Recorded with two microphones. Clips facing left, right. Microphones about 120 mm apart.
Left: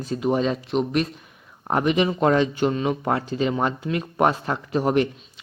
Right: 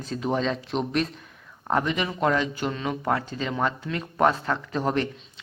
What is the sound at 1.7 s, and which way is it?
Speech, 20° left (ahead or behind).